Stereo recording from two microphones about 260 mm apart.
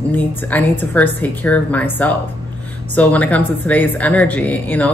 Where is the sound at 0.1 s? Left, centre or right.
Centre.